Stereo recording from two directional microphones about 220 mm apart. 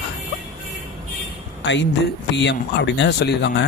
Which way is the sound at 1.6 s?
55° left (ahead or behind).